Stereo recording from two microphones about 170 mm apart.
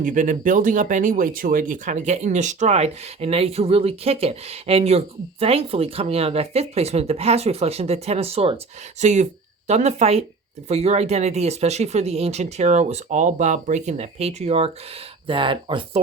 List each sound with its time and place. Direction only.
0.0 s speech: 50° right (ahead or behind); by 16.0 s 30° right (ahead or behind)